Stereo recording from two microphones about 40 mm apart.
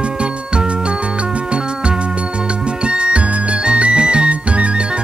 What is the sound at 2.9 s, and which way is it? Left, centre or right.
Music, right.